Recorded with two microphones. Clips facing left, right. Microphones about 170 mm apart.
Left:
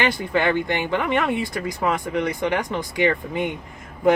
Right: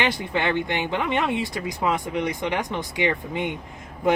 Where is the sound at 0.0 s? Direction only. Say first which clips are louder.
Left 3 dB; 20° right (ahead or behind).